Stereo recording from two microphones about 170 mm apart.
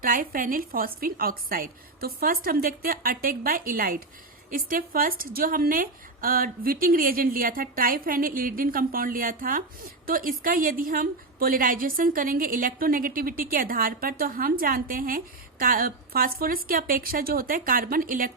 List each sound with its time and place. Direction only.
0.0 s a woman's voice: 55° right (ahead or behind)